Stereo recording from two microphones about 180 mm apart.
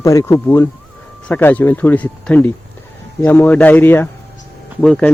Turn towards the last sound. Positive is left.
turn(degrees=5)  # may be behind; listen again after turning